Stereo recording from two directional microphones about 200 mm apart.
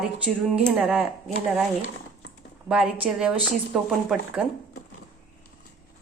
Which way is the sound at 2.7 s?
5° right (ahead or behind).